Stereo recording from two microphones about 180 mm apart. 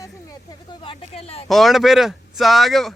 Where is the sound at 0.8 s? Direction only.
30° left (ahead or behind).